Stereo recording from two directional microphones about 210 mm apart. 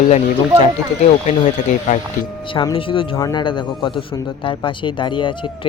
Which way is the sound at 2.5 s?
25° left (ahead or behind).